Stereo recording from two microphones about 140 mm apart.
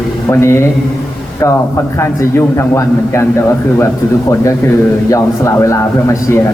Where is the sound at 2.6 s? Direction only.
20° left (ahead or behind).